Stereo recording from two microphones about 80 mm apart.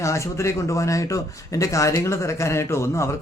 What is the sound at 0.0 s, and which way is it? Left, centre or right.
Speech, left.